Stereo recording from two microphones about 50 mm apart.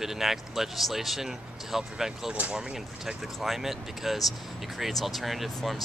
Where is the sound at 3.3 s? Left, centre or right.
Centre.